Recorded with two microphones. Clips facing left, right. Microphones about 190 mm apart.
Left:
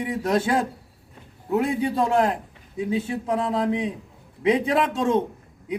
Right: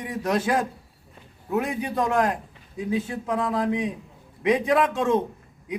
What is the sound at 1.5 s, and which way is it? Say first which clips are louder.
A man's voice: left 3 dB; 25° left (ahead or behind).